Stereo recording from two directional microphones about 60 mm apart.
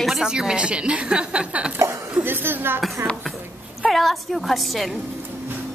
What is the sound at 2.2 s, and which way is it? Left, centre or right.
Speech, right.